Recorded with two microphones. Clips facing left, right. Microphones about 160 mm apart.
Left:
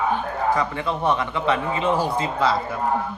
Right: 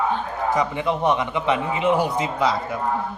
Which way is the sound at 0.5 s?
15° right (ahead or behind).